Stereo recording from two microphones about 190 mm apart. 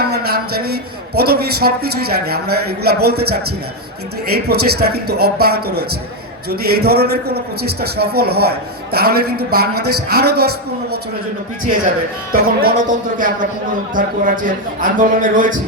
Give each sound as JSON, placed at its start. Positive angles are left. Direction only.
{"t": 0.0, "sound": "a man's voice", "side_deg": -55}
{"t": 4.4, "sound": "a man's voice", "side_deg": -55}
{"t": 12.3, "sound": "a man's voice", "side_deg": -50}